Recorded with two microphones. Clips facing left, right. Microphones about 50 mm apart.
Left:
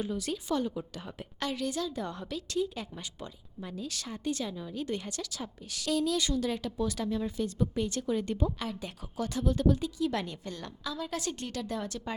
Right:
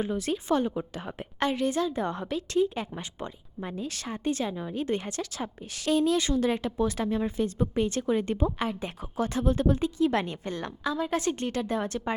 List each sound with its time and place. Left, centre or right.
0.0 s a woman's voice: right